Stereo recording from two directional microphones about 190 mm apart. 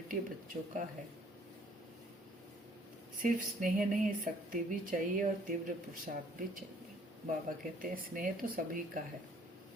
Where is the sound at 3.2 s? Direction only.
45° right (ahead or behind).